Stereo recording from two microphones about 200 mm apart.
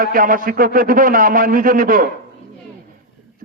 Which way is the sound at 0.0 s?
45° right (ahead or behind).